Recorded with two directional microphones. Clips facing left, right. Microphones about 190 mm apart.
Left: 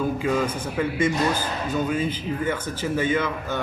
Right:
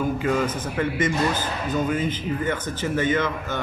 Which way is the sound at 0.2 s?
10° left (ahead or behind).